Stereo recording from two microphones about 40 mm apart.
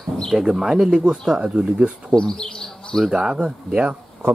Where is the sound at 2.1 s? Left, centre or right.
Centre.